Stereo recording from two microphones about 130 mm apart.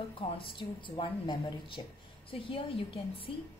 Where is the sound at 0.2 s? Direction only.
40° left (ahead or behind).